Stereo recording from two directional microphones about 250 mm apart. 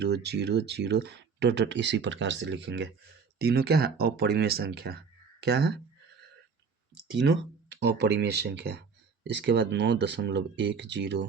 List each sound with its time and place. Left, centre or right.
0.0 s speech: right
7.2 s speech: right